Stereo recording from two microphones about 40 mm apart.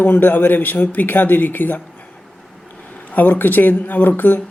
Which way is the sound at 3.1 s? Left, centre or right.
Left.